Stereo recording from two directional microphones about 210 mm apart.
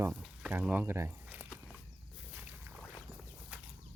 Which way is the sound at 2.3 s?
10° right (ahead or behind).